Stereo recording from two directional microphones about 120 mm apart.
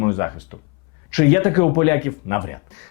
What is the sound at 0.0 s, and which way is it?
Speech, 25° left (ahead or behind).